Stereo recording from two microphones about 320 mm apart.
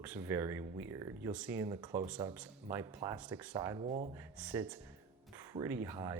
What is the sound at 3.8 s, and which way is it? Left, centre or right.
Speech, right.